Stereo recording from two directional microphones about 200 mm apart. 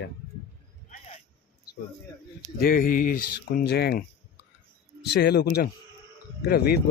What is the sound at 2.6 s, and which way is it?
Speech, 45° left (ahead or behind).